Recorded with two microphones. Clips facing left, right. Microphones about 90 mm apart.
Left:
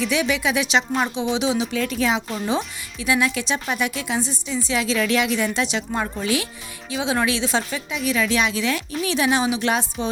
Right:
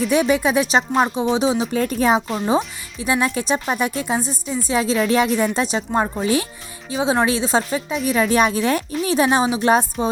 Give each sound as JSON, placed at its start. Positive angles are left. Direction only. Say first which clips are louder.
{"t": 0.1, "sound": "speech", "louder": "right 5 dB", "side_deg": -45}